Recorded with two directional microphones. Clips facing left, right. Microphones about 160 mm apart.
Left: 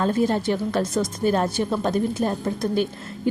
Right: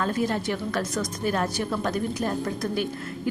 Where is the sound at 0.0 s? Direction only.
30° left (ahead or behind).